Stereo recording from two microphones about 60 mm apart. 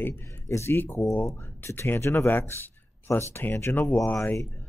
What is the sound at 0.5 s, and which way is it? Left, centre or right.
Speech, left.